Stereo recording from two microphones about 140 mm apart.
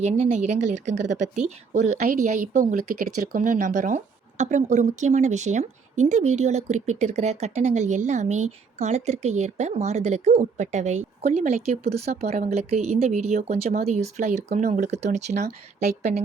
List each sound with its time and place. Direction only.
0.0 s a woman's voice: 55° right (ahead or behind)